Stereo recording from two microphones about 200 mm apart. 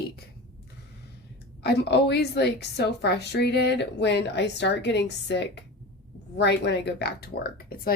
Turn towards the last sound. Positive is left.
turn(degrees=50)  # may be behind; listen again after turning